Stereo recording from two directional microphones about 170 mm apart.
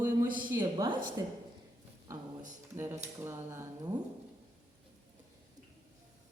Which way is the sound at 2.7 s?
15° right (ahead or behind).